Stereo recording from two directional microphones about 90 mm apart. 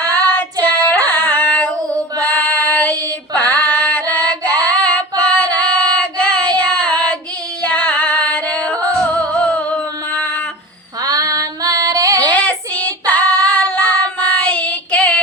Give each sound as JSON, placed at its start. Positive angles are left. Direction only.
{"t": 0.0, "sound": "child singing", "side_deg": 20}
{"t": 2.2, "sound": "female singing", "side_deg": 15}
{"t": 4.3, "sound": "singing", "side_deg": 15}
{"t": 4.7, "sound": "child singing", "side_deg": 10}
{"t": 7.6, "sound": "yodeling", "side_deg": 15}
{"t": 9.4, "sound": "a sound", "side_deg": 15}
{"t": 11.0, "sound": "female singing", "side_deg": -40}
{"t": 12.2, "sound": "child singing", "side_deg": 15}